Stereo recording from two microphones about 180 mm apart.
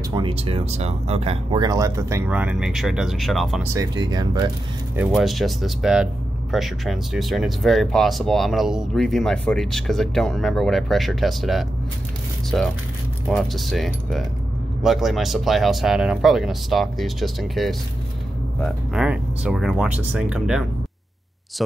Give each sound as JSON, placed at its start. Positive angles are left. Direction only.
{"t": 0.1, "sound": "speech", "side_deg": -30}
{"t": 3.6, "sound": "speech", "side_deg": -20}
{"t": 5.1, "sound": "speech", "side_deg": 0}